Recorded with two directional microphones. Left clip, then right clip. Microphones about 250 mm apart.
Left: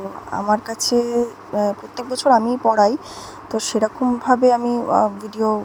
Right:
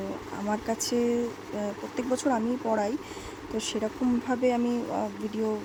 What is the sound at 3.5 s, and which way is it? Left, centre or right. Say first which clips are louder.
Speech: left 11 dB; centre.